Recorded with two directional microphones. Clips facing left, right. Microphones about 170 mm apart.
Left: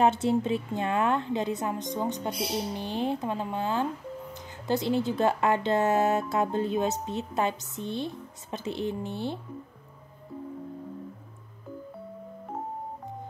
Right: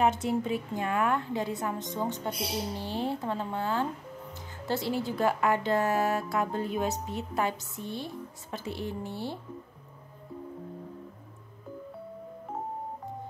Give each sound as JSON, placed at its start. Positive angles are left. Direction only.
{"t": 0.0, "sound": "speech", "side_deg": 30}